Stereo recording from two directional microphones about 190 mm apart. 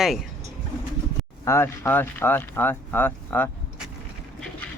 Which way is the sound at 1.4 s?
15° left (ahead or behind).